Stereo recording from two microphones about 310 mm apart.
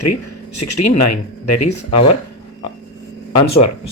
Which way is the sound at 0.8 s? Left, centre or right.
Left.